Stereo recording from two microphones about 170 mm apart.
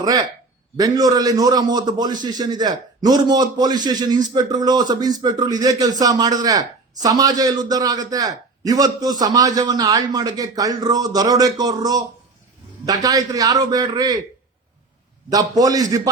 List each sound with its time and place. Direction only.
0.0 s a man's voice: 25° right (ahead or behind)
15.3 s a man's voice: 20° right (ahead or behind)